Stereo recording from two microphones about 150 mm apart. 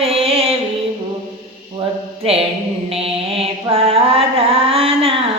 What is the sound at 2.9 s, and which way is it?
Mantra, 40° right (ahead or behind).